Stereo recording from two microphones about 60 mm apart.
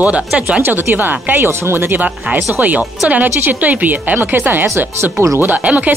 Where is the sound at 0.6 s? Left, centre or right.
Right.